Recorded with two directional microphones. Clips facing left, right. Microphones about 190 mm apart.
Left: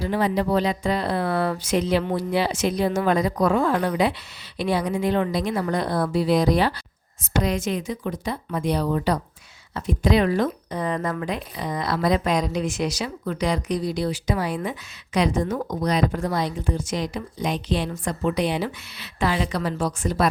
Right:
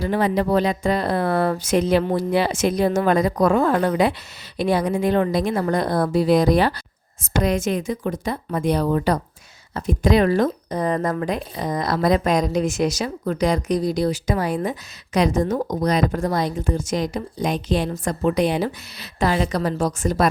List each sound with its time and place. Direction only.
0.0 s speech: 55° right (ahead or behind)